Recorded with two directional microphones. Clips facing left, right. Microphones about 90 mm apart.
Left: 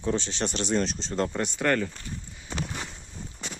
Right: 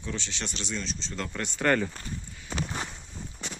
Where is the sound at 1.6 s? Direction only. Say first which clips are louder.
Right 1 dB; 5° right (ahead or behind).